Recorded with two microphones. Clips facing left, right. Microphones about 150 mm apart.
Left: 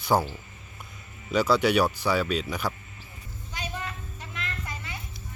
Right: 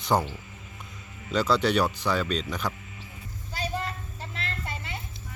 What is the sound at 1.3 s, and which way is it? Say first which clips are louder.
Speech: left 2 dB; 10° left (ahead or behind).